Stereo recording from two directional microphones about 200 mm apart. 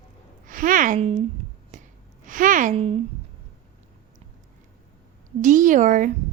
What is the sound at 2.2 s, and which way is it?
Speech, 40° right (ahead or behind).